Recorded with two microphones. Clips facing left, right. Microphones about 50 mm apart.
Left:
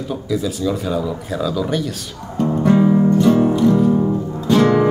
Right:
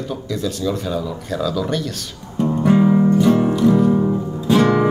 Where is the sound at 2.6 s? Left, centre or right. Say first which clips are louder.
Even; centre.